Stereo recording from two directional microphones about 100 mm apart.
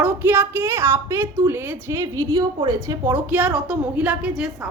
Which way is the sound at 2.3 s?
45° right (ahead or behind).